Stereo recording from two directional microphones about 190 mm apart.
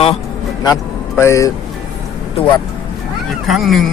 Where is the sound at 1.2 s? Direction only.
15° left (ahead or behind).